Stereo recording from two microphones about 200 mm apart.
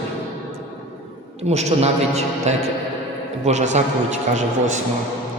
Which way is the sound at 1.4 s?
30° right (ahead or behind).